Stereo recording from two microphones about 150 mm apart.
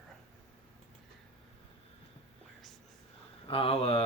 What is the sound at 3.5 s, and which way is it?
Speech, 40° left (ahead or behind).